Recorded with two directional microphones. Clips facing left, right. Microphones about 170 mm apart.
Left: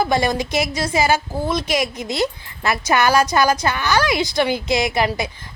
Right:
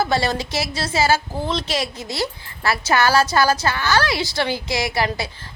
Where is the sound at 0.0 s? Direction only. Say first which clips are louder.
Left 2 dB; 15° left (ahead or behind).